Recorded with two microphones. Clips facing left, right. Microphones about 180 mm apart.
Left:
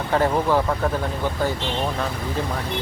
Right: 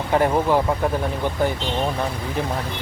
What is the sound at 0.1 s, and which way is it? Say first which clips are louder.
Speech: right 1 dB; 20° right (ahead or behind).